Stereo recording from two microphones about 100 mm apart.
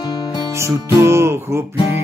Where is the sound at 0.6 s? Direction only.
30° right (ahead or behind).